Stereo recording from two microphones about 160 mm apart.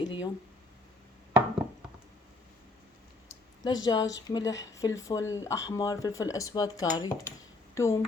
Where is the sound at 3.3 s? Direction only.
25° left (ahead or behind).